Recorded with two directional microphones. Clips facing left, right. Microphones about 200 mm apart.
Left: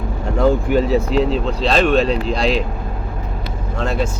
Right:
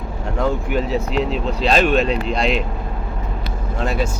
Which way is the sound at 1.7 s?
5° right (ahead or behind).